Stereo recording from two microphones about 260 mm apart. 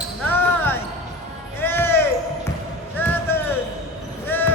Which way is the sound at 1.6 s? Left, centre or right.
Centre.